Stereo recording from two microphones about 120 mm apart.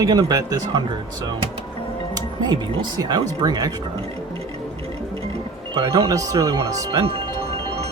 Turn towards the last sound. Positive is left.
turn(degrees=-30)  # may be behind; listen again after turning